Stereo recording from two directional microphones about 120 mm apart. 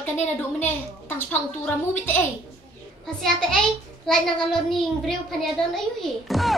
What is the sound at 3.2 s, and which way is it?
A child's voice, 5° left (ahead or behind).